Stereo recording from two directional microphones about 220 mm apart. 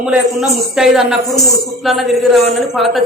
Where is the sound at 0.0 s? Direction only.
5° right (ahead or behind).